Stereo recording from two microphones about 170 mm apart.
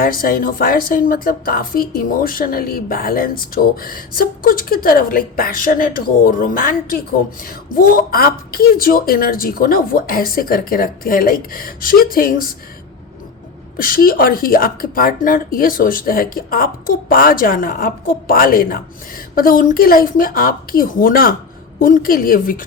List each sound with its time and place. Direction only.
0.0 s speech: 55° left (ahead or behind)
13.7 s speech: 55° left (ahead or behind)